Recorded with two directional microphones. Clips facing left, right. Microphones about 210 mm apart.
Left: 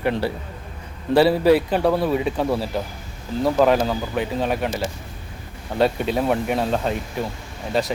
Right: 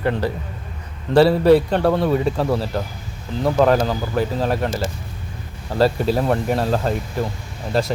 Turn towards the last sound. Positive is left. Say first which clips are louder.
# right 2 dB
turn(degrees=0)  # may be behind; listen again after turning